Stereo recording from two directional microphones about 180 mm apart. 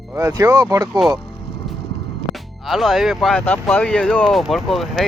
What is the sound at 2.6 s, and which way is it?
Speech, centre (ahead or behind).